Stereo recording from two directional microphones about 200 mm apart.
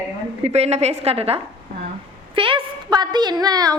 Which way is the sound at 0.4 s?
30° right (ahead or behind).